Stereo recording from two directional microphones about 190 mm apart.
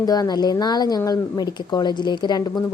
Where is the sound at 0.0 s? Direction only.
20° left (ahead or behind).